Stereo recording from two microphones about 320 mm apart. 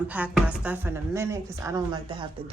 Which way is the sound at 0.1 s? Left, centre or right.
Centre.